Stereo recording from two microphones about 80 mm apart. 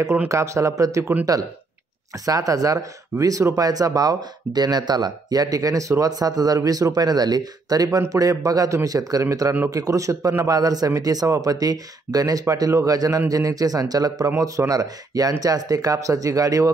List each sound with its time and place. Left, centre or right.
0.3 s speech: right